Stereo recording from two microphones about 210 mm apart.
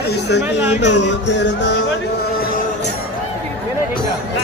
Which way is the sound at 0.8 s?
55° left (ahead or behind).